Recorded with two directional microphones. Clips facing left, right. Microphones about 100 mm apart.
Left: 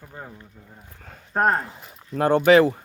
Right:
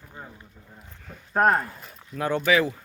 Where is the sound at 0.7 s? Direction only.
45° left (ahead or behind).